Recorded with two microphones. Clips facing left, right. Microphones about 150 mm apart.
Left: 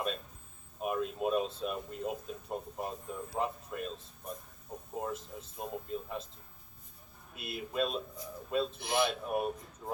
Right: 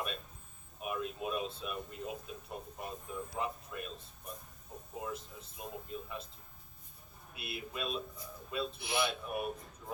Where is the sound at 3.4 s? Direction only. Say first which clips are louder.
Left 4 dB; 35° left (ahead or behind).